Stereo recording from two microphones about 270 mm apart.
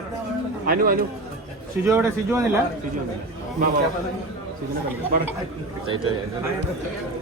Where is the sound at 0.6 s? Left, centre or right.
Right.